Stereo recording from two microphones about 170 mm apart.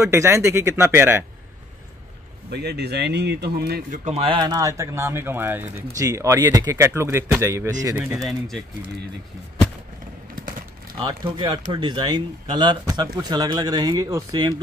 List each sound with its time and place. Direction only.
0.0 s speech: 15° right (ahead or behind)
2.5 s speech: 75° right (ahead or behind)
3.9 s speech: 40° right (ahead or behind); by 8.3 s 15° right (ahead or behind)
8.3 s speech: centre (ahead or behind)
11.0 s speech: 25° right (ahead or behind)